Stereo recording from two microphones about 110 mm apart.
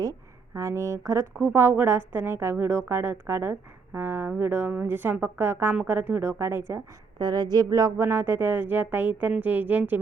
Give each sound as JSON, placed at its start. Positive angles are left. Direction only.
{"t": 0.0, "sound": "a woman's voice", "side_deg": -30}
{"t": 7.2, "sound": "speech", "side_deg": -40}
{"t": 8.0, "sound": "a woman's voice", "side_deg": -20}